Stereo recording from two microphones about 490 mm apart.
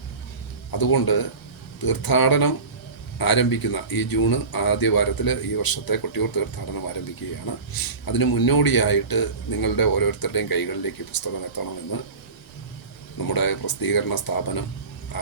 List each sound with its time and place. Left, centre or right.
0.7 s speech: left
13.2 s speech: left